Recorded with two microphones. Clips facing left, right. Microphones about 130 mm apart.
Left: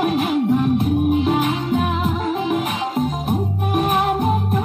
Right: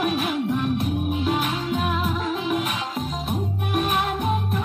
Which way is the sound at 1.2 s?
25° left (ahead or behind).